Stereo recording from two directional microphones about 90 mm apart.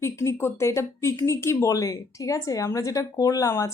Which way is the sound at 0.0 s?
30° left (ahead or behind).